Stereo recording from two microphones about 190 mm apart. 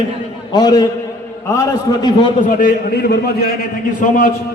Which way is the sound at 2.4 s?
50° left (ahead or behind).